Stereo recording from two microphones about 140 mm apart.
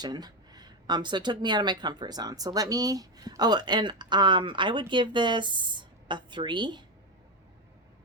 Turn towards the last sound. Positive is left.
turn(degrees=-35)  # may be behind; listen again after turning